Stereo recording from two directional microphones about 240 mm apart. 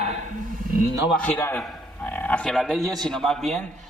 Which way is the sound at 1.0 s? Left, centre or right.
Left.